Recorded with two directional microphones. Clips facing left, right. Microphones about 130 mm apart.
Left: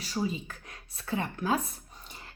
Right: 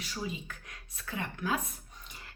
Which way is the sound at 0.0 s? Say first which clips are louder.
Left 6 dB; 35° left (ahead or behind).